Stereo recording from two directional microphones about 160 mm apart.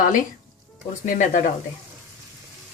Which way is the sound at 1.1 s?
55° left (ahead or behind).